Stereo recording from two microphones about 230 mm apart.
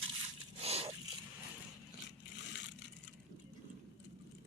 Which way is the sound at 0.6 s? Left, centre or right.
Right.